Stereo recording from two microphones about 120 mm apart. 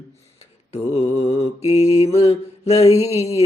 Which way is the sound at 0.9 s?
60° left (ahead or behind).